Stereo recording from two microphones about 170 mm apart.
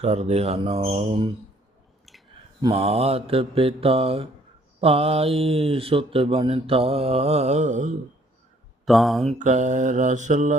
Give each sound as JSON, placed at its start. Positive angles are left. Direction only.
{"t": 0.0, "sound": "speech", "side_deg": -40}
{"t": 2.7, "sound": "speech", "side_deg": -35}
{"t": 8.8, "sound": "speech", "side_deg": 0}
{"t": 9.4, "sound": "mantra", "side_deg": -45}